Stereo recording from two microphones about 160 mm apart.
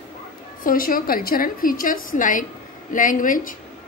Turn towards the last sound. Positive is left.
turn(degrees=60)  # may be behind; listen again after turning